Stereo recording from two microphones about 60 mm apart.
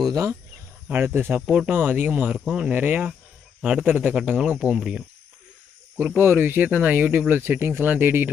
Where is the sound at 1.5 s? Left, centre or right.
Right.